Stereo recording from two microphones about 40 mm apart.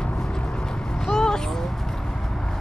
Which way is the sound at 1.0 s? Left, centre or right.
Centre.